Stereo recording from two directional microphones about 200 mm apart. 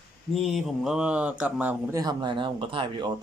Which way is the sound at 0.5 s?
Centre (ahead or behind).